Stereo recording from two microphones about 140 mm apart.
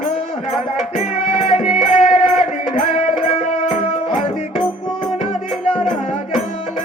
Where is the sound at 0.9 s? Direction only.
55° left (ahead or behind).